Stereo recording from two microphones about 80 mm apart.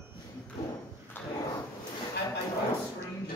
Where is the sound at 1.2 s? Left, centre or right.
Left.